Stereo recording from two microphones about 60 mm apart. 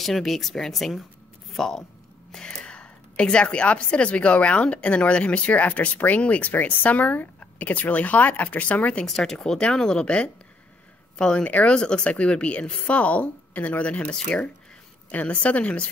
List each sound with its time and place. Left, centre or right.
0.0 s speech: centre
2.3 s a woman's voice: centre
9.0 s a woman's voice: centre